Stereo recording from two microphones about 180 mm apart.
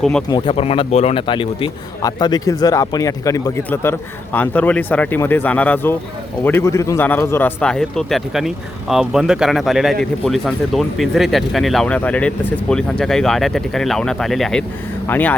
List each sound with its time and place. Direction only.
0.0 s speech: 5° left (ahead or behind)
0.3 s speech: 25° left (ahead or behind); by 15.4 s 10° left (ahead or behind)